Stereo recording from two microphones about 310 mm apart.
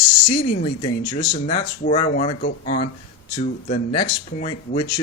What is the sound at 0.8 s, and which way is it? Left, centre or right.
Speech, centre.